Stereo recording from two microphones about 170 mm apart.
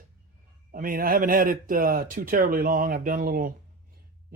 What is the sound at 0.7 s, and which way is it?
Speech, 55° right (ahead or behind).